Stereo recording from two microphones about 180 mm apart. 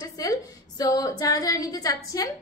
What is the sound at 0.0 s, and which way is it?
A woman's voice, 20° left (ahead or behind).